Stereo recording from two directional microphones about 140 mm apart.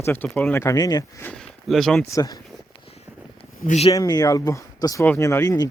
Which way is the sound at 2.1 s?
30° left (ahead or behind).